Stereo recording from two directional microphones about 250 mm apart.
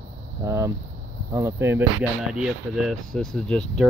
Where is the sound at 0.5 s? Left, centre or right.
Centre.